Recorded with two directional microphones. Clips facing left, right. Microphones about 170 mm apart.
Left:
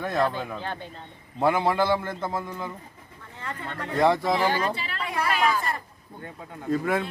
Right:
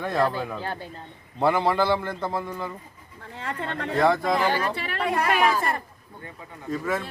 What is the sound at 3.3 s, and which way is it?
Speech, 70° right (ahead or behind).